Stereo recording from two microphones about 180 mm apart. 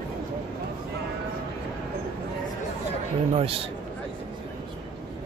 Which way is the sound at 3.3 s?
30° right (ahead or behind).